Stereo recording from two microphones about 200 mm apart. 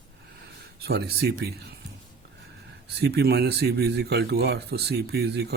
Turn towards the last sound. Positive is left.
turn(degrees=-55)  # may be behind; listen again after turning